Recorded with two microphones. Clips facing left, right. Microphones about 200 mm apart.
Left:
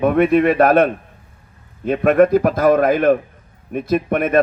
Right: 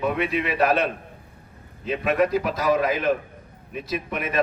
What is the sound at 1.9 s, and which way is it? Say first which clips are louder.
A man's voice: left 9 dB; 55° left (ahead or behind).